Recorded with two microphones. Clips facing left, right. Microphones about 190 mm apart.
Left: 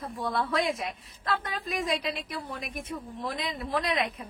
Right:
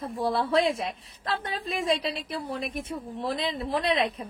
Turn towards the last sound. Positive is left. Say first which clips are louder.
# right 3 dB
turn(degrees=-30)  # may be behind; listen again after turning